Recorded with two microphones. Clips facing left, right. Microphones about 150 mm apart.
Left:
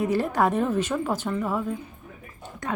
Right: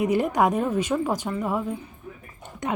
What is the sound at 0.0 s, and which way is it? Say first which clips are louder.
A woman's voice: right 2 dB; 15° right (ahead or behind).